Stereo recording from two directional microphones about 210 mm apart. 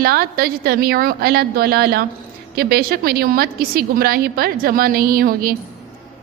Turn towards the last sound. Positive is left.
turn(degrees=-45)  # may be behind; listen again after turning